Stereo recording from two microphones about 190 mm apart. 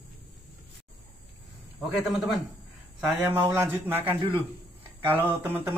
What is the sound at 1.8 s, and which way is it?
A man's voice, centre (ahead or behind).